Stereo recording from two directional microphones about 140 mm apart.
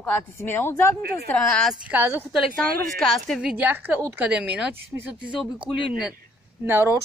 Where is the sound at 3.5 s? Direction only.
15° right (ahead or behind).